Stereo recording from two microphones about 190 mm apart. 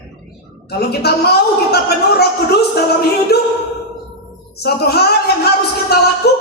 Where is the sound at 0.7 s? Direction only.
55° left (ahead or behind).